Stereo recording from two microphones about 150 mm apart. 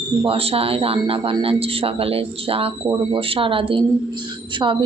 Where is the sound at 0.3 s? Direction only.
40° right (ahead or behind).